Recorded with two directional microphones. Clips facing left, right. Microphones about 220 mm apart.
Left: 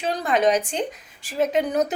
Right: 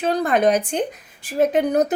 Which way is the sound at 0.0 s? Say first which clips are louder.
Right 3 dB; 55° right (ahead or behind).